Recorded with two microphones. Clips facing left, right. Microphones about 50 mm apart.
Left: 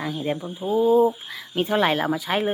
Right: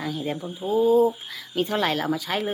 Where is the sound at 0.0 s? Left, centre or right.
Centre.